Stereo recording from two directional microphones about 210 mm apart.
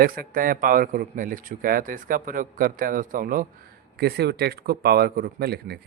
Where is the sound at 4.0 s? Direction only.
50° right (ahead or behind).